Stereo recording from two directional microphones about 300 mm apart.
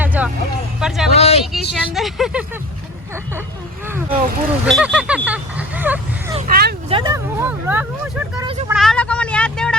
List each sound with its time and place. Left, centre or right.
0.0 s vehicle: centre
0.8 s a sound: centre
1.1 s vehicle: left
1.5 s speech: centre
4.6 s vehicle: centre
6.5 s vehicle: right
6.9 s a sound: centre
8.4 s vehicle: centre
8.7 s vehicle: centre